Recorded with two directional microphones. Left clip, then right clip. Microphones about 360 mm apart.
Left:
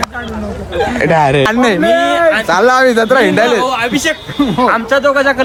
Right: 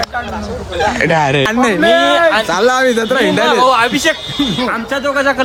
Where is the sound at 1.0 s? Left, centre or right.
Centre.